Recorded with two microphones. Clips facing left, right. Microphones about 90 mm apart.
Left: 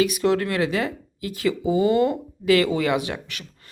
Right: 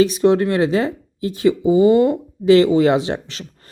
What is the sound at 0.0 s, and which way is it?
Speech, 30° right (ahead or behind).